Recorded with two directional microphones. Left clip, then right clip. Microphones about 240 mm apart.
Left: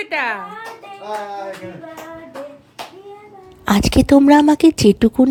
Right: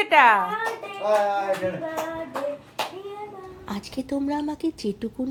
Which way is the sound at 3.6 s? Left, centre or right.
Left.